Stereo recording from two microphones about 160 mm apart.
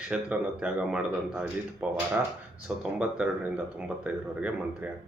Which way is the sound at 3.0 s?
5° right (ahead or behind).